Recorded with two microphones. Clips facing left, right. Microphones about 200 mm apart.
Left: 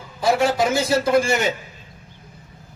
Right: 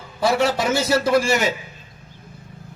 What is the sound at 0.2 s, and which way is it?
A man's voice, 60° right (ahead or behind).